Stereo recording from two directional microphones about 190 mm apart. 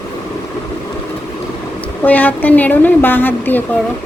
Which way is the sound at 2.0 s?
10° left (ahead or behind).